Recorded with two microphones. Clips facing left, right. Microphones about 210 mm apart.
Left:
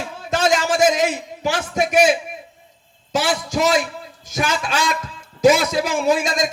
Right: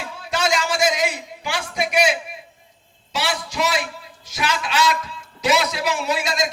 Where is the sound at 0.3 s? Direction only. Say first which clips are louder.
Left 4 dB; 45° left (ahead or behind).